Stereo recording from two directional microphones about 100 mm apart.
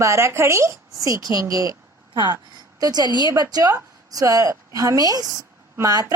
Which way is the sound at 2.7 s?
40° right (ahead or behind).